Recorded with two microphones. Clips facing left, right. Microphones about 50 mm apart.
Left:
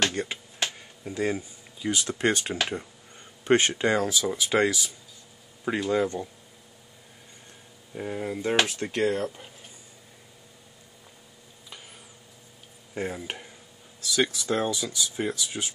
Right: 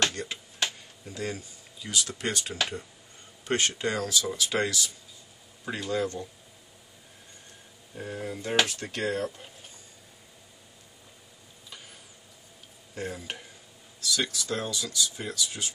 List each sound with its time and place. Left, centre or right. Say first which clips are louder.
0.1 s speech: left 5 dB; left
7.9 s speech: left 4 dB; left
12.9 s speech: left 4 dB; left